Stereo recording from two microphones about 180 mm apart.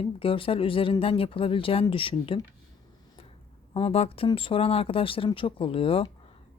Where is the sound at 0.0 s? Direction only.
30° left (ahead or behind).